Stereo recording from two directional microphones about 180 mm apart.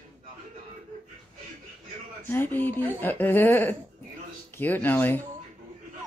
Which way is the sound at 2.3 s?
10° left (ahead or behind).